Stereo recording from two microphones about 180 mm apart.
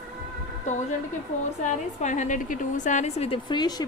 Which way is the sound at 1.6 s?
40° left (ahead or behind).